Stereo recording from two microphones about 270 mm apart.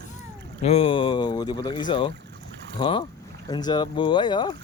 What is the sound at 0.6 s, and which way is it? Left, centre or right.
Speech, left.